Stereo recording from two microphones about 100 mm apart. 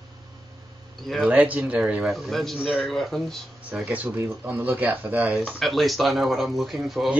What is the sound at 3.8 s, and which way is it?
Speech, 15° right (ahead or behind).